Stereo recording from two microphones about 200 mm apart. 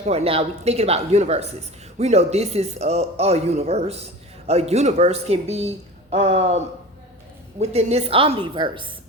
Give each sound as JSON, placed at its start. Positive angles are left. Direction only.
{"t": 0.0, "sound": "speech", "side_deg": -30}
{"t": 7.6, "sound": "a woman's voice", "side_deg": -30}